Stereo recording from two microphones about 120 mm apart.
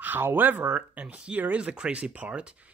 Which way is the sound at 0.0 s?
15° right (ahead or behind).